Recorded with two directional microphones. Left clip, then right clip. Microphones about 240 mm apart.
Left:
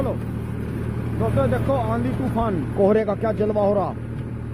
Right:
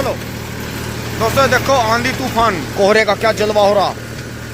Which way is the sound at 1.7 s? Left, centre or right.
Right.